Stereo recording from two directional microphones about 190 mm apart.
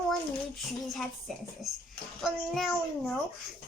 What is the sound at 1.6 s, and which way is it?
A child's voice, centre (ahead or behind).